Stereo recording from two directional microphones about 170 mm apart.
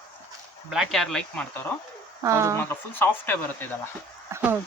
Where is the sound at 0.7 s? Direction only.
Centre (ahead or behind).